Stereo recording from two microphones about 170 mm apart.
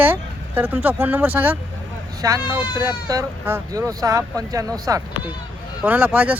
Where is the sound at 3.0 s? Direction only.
15° right (ahead or behind).